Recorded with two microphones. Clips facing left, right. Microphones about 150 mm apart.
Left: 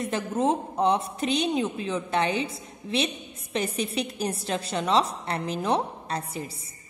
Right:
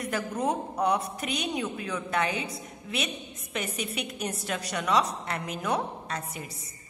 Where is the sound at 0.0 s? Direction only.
25° left (ahead or behind).